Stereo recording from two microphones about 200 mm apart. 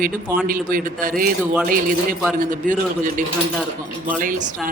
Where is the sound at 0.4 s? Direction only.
45° right (ahead or behind).